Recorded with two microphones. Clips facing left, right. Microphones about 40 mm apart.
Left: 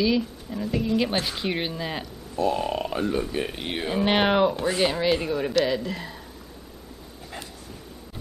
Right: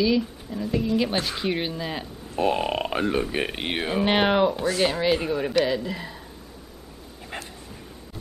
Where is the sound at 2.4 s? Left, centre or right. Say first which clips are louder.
Right 1 dB; right.